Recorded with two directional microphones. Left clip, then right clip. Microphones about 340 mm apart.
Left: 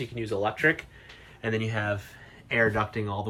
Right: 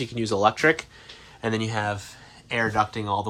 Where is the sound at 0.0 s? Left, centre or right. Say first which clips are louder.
Right 7 dB; centre.